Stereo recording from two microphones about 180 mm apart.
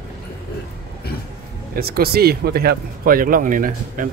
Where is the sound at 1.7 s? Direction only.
60° right (ahead or behind).